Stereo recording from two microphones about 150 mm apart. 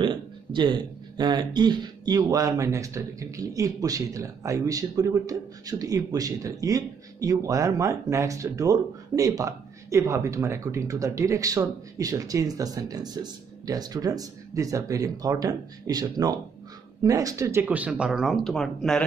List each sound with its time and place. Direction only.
0.0 s speech: 30° right (ahead or behind); by 19.0 s 5° left (ahead or behind)